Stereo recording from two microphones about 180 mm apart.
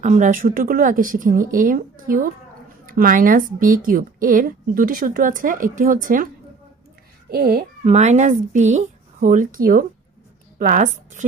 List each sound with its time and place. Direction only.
0.0 s a woman's voice: 45° right (ahead or behind)
7.3 s a child's voice: 55° right (ahead or behind)
7.9 s a woman's voice: 40° right (ahead or behind)